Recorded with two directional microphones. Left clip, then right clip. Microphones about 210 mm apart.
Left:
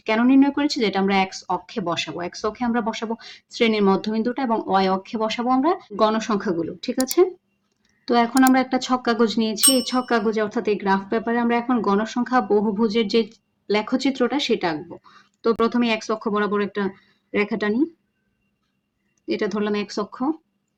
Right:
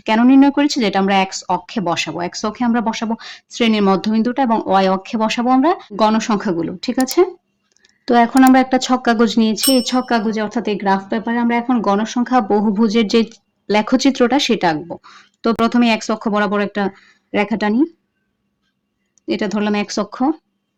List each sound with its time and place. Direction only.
0.0 s speech: 25° right (ahead or behind)
7.8 s a sound: 25° right (ahead or behind)
8.5 s speech: 30° right (ahead or behind)
19.2 s speech: 30° right (ahead or behind)